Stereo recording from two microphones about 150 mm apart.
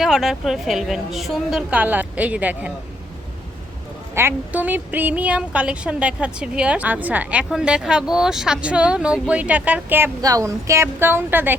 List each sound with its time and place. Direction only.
0.0 s a woman's voice: centre (ahead or behind)
4.1 s speech: 15° right (ahead or behind)
10.2 s a woman's voice: 25° right (ahead or behind)